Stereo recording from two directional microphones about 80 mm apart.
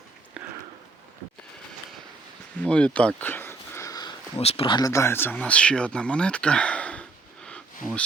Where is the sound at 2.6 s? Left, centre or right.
Centre.